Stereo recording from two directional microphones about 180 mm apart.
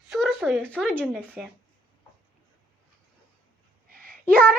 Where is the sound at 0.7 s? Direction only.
5° left (ahead or behind).